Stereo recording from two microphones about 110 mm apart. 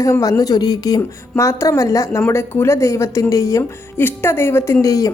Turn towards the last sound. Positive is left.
turn(degrees=30)  # may be behind; listen again after turning